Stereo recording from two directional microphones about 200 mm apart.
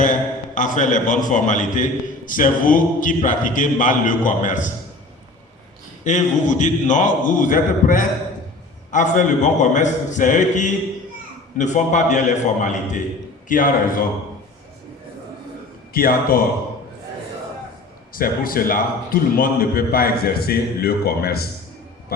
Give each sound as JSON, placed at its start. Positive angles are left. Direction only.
{"t": 0.0, "sound": "a man's voice", "side_deg": 40}
{"t": 6.1, "sound": "a man's voice", "side_deg": 35}
{"t": 15.9, "sound": "a man's voice", "side_deg": 45}
{"t": 18.1, "sound": "a man's voice", "side_deg": 45}